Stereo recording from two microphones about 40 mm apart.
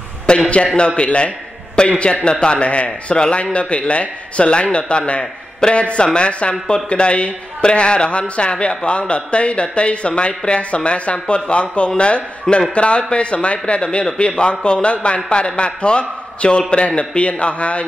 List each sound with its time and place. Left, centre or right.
0.3 s a man's voice: left